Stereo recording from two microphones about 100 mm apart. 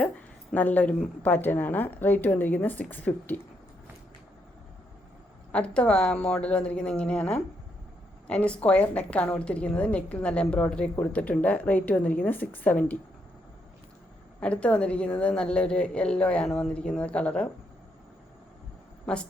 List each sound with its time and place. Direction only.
0.5 s a woman's voice: 15° left (ahead or behind)
5.5 s a woman's voice: 10° left (ahead or behind)
14.4 s a woman's voice: 15° left (ahead or behind)
19.0 s speech: 10° left (ahead or behind)